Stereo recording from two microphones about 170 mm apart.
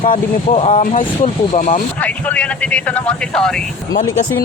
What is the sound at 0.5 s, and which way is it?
Speech, 40° left (ahead or behind).